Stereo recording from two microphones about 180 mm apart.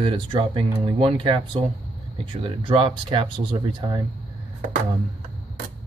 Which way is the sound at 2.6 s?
30° right (ahead or behind).